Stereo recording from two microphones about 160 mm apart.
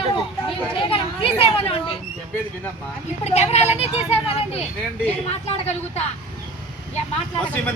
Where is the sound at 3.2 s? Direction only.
40° left (ahead or behind).